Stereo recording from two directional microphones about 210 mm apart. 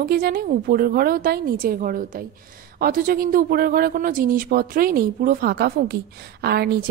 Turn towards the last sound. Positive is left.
turn(degrees=-50)  # may be behind; listen again after turning